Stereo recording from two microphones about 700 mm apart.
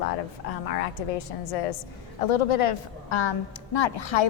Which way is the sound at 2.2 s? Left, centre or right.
Left.